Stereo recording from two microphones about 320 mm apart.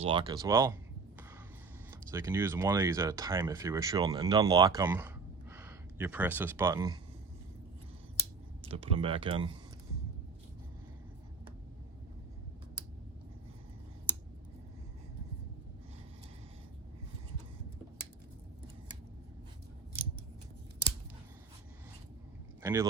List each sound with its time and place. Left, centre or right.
0.0 s speech: centre
1.9 s speech: centre
8.6 s speech: centre
22.6 s speech: centre